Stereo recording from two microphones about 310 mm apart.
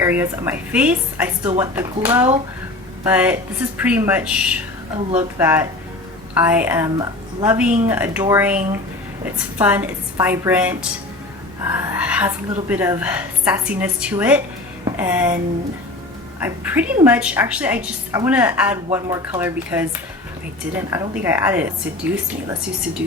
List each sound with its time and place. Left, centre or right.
0.0 s a woman's voice: centre
16.4 s a woman's voice: centre
20.9 s a woman's voice: centre